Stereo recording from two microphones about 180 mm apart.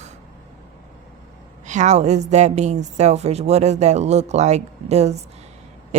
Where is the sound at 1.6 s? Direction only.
40° right (ahead or behind).